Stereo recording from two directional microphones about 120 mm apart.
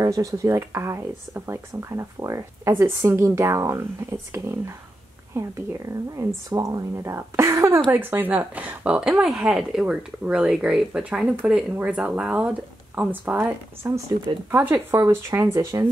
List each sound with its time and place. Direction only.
0.0 s speech: 30° right (ahead or behind)
6.1 s speech: 30° right (ahead or behind)